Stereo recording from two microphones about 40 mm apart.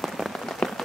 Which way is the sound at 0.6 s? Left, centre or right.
Left.